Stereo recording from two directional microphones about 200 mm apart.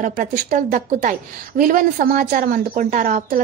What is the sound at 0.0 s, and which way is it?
A woman's voice, 40° right (ahead or behind).